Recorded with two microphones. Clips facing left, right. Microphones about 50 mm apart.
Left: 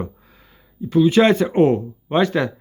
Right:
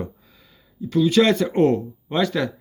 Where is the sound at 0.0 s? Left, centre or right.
Left.